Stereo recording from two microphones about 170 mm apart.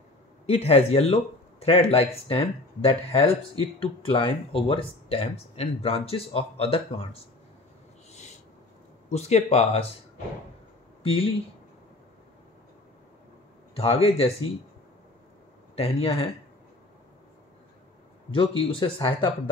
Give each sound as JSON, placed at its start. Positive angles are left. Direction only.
{"t": 0.5, "sound": "speech", "side_deg": 35}
{"t": 8.1, "sound": "owl", "side_deg": 40}
{"t": 9.1, "sound": "speech", "side_deg": 40}
{"t": 11.0, "sound": "speech", "side_deg": 35}
{"t": 13.7, "sound": "speech", "side_deg": 35}
{"t": 15.7, "sound": "speech", "side_deg": 35}
{"t": 18.3, "sound": "speech", "side_deg": 30}